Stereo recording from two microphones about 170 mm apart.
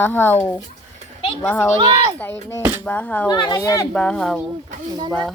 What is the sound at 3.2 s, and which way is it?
Speech, 25° left (ahead or behind).